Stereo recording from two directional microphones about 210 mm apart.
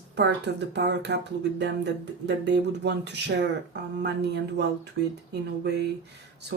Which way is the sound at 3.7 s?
55° right (ahead or behind).